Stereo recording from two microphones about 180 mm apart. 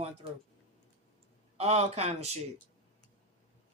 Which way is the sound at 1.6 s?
35° right (ahead or behind).